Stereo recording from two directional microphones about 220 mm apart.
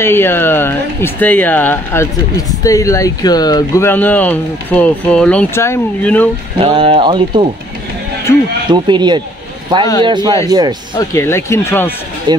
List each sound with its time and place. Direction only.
0.0 s speech: 10° left (ahead or behind)
6.6 s speech: 25° right (ahead or behind)
8.6 s speech: 20° right (ahead or behind)
11.0 s speech: 10° left (ahead or behind)
12.3 s speech: 20° right (ahead or behind)